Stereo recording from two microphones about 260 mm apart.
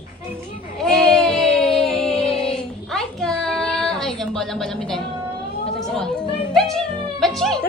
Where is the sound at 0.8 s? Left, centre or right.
Centre.